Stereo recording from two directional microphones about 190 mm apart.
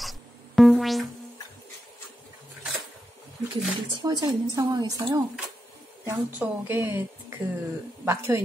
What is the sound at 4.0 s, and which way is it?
A woman's voice, 20° right (ahead or behind).